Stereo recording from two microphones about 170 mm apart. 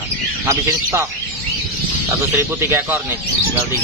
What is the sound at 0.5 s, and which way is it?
Speech, 20° right (ahead or behind).